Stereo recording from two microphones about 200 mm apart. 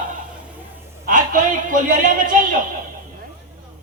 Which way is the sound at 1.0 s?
45° right (ahead or behind).